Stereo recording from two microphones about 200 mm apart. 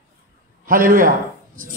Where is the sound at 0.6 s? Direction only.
45° right (ahead or behind).